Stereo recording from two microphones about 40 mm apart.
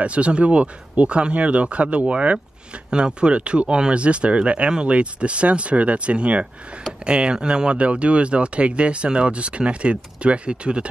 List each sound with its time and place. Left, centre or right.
0.0 s speech: right